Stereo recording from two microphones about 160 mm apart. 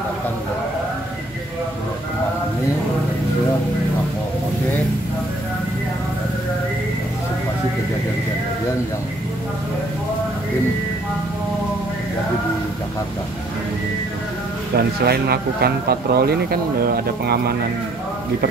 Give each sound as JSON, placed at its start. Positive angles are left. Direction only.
{"t": 14.8, "sound": "speech", "side_deg": -80}